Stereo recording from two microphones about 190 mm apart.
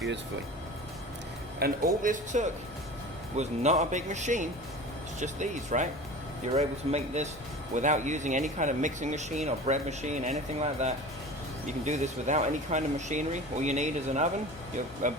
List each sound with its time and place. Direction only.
1.5 s speech: 50° right (ahead or behind)